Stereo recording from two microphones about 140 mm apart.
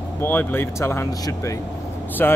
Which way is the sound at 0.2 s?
15° left (ahead or behind).